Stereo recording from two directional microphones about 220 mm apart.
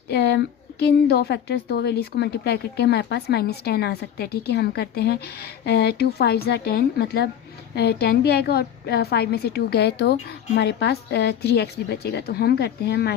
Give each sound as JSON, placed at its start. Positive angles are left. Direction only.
{"t": 0.1, "sound": "a woman's voice", "side_deg": 50}